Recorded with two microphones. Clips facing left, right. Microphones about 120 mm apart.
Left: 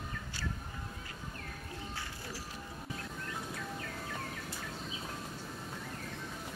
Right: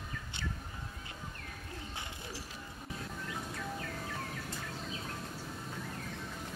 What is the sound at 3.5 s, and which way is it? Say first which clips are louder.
Bird: right 1 dB; centre (ahead or behind).